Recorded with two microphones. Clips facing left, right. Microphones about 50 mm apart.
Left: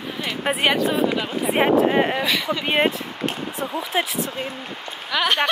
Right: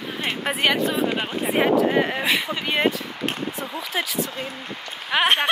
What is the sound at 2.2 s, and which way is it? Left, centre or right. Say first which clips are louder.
Speech: even; right.